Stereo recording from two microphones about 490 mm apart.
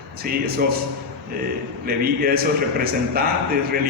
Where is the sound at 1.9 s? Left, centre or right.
Centre.